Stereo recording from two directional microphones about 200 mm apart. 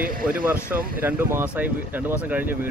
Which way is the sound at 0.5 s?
10° right (ahead or behind).